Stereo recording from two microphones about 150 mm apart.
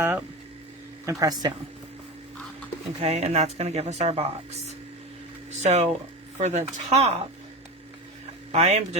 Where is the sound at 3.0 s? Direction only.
45° right (ahead or behind).